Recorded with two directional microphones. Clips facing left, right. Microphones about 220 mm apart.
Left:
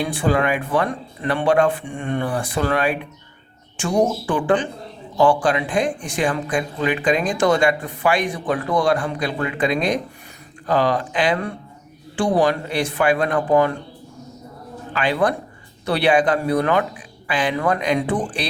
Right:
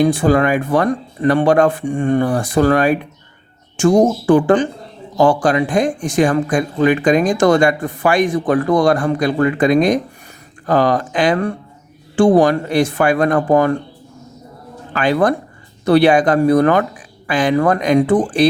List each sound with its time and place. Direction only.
0.0 s speech: 40° right (ahead or behind)
14.9 s speech: 45° right (ahead or behind)